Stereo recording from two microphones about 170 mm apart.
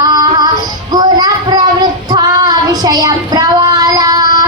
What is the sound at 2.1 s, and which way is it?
Child singing, 25° right (ahead or behind).